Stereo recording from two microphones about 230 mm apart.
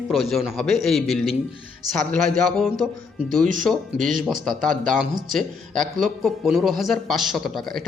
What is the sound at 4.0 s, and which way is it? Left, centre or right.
Speech, right.